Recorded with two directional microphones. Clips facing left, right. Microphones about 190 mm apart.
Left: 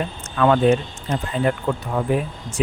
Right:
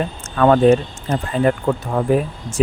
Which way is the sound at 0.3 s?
40° right (ahead or behind).